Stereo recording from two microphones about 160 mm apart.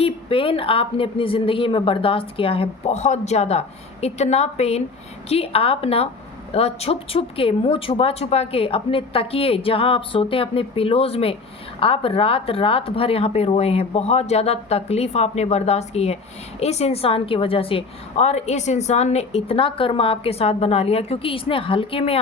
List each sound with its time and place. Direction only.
0.0 s a woman's voice: 35° left (ahead or behind)